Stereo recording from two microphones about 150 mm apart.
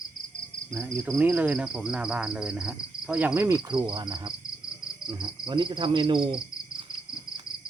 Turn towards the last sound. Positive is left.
turn(degrees=-35)  # may be behind; listen again after turning